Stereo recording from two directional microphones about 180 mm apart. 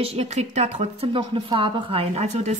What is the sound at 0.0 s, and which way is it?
Speech, 35° right (ahead or behind).